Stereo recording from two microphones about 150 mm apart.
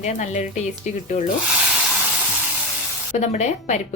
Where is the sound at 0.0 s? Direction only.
50° left (ahead or behind).